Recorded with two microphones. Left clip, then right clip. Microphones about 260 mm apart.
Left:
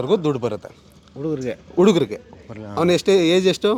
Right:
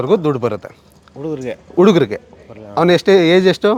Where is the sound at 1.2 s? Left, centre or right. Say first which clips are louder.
Right 2 dB; centre.